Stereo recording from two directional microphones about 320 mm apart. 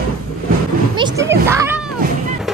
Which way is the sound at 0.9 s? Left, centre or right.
Centre.